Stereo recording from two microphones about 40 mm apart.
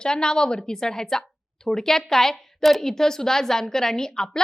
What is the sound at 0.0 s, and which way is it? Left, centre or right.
A woman's voice, centre.